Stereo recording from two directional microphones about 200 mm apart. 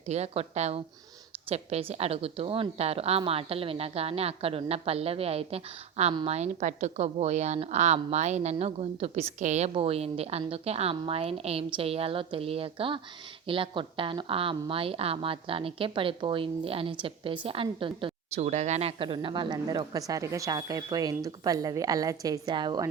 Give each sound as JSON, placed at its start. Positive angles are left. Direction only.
{"t": 0.1, "sound": "a woman's voice", "side_deg": -35}